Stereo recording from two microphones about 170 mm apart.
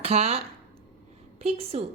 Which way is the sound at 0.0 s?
40° right (ahead or behind).